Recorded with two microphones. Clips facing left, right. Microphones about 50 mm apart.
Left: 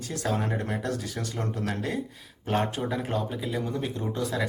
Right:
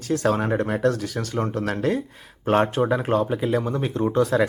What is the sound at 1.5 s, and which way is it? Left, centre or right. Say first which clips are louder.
Speech: right 7 dB; right.